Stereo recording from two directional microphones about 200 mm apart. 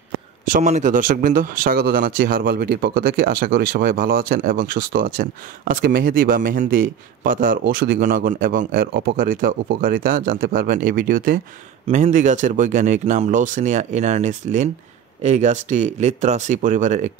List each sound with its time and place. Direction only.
0.5 s speech: 40° right (ahead or behind)